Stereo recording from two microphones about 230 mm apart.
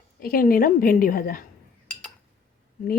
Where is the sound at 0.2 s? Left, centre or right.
Left.